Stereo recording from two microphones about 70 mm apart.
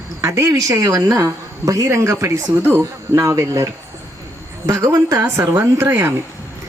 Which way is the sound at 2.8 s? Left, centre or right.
Right.